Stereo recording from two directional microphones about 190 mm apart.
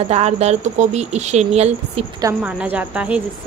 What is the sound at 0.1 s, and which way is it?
Speech, 35° right (ahead or behind).